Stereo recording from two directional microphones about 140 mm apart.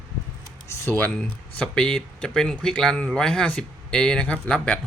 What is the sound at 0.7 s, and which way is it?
Speech, 20° left (ahead or behind).